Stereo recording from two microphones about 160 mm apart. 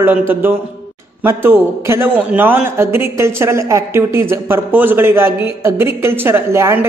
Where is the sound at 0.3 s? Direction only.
15° right (ahead or behind).